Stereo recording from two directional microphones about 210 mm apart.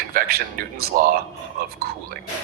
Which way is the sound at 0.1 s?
45° right (ahead or behind).